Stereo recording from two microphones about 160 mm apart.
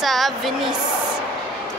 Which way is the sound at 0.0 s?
Centre (ahead or behind).